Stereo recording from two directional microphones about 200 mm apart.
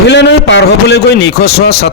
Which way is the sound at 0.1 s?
60° left (ahead or behind).